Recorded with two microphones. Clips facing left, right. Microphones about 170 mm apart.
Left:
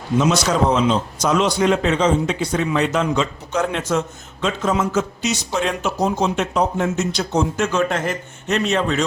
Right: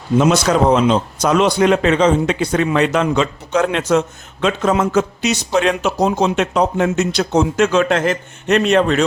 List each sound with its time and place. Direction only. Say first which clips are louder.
0.2 s a man's voice: right 4 dB; 55° right (ahead or behind)